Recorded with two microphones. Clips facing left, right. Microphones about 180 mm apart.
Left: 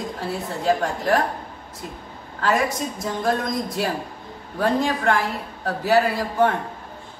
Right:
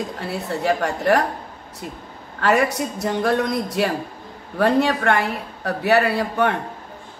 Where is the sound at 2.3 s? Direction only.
70° right (ahead or behind).